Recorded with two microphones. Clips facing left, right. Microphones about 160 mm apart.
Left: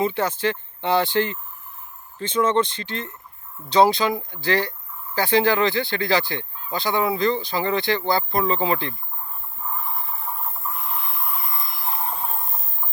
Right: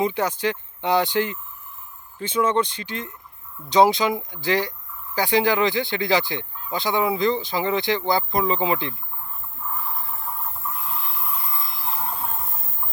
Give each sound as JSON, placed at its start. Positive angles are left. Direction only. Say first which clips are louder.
{"t": 0.0, "sound": "speech", "louder": "even", "side_deg": -15}
{"t": 12.1, "sound": "train", "louder": "left 1 dB", "side_deg": 15}